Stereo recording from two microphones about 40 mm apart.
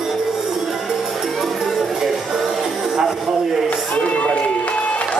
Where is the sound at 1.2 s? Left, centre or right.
Centre.